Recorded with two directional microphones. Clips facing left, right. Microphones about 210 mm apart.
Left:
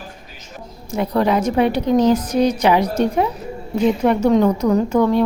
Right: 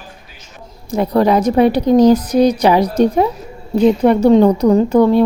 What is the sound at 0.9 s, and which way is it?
A woman's voice, 40° right (ahead or behind).